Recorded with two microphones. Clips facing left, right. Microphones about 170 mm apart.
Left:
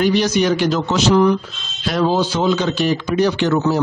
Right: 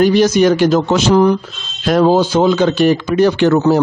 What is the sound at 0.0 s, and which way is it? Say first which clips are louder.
Speech: right 6 dB; 45° right (ahead or behind).